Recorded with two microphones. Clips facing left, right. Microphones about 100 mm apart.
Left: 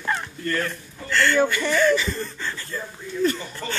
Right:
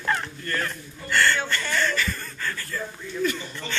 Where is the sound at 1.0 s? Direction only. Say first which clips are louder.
Left 3 dB; centre (ahead or behind).